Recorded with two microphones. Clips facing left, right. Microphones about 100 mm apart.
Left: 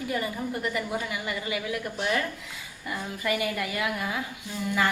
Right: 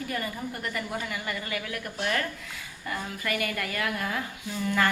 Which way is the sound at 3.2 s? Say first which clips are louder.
Left 4 dB; 15° left (ahead or behind).